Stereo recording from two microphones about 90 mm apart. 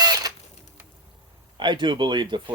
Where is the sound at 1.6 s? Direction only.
60° right (ahead or behind).